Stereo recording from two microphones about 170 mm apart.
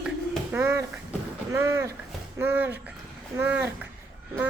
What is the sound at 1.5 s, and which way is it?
A woman's voice, 15° right (ahead or behind).